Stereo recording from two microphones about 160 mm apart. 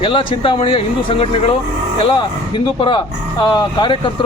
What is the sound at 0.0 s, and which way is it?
Speech, 35° left (ahead or behind).